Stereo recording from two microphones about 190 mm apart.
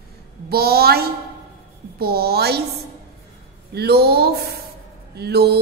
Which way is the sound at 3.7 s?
55° right (ahead or behind).